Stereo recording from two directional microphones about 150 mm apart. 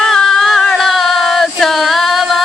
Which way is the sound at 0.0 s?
Centre (ahead or behind).